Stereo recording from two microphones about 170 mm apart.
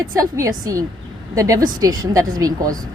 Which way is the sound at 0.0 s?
20° right (ahead or behind).